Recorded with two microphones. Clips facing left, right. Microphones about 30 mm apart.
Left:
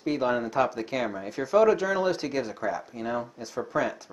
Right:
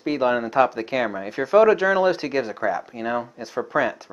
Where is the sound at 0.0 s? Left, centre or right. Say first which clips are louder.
Right 5 dB; right.